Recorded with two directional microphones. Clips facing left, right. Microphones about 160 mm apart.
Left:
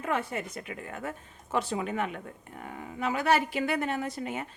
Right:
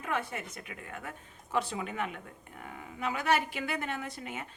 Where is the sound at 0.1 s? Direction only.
35° left (ahead or behind).